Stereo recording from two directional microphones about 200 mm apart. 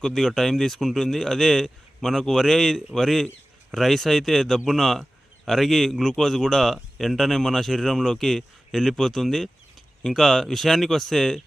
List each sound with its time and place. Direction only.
0.0 s speech: 5° left (ahead or behind)